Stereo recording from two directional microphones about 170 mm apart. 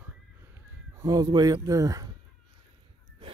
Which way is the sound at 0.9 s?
20° right (ahead or behind).